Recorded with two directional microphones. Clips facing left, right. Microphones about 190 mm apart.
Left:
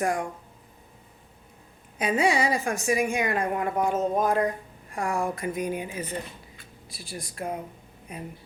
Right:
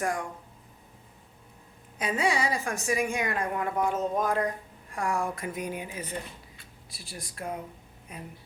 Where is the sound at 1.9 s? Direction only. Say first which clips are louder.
Left 4 dB; 15° left (ahead or behind).